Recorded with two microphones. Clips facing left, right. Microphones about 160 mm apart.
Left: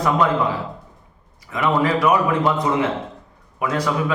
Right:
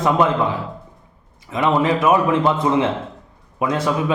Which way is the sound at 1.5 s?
20° right (ahead or behind).